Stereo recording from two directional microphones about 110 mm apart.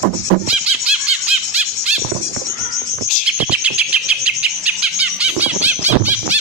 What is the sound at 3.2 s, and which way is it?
Bird, 10° right (ahead or behind).